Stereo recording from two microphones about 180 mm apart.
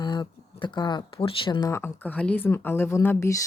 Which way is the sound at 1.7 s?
15° left (ahead or behind).